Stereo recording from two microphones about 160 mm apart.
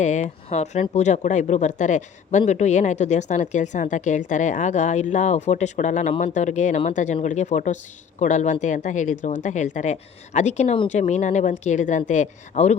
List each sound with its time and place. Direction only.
0.0 s speech: 45° left (ahead or behind)